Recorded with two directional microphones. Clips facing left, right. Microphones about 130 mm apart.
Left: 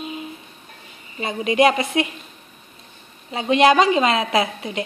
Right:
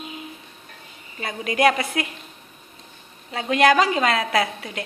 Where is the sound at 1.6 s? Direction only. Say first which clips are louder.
Left 2 dB; 20° left (ahead or behind).